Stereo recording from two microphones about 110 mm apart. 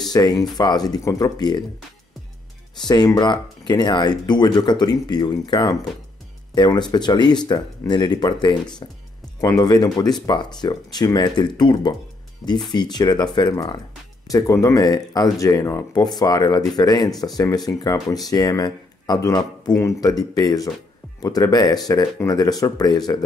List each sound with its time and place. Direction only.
0.1 s speech: 35° left (ahead or behind)
2.8 s speech: 40° left (ahead or behind)
9.4 s speech: 30° left (ahead or behind)
12.4 s speech: centre (ahead or behind)
12.7 s speech: 40° left (ahead or behind)
14.3 s speech: 30° left (ahead or behind)
16.0 s speech: 35° left (ahead or behind)